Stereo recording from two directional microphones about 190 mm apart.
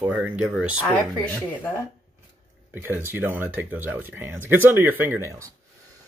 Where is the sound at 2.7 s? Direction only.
10° right (ahead or behind).